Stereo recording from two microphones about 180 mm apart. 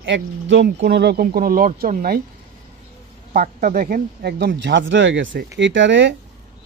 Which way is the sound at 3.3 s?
50° right (ahead or behind).